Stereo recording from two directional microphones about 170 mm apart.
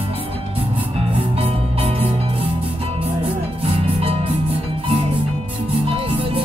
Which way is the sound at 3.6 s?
35° right (ahead or behind).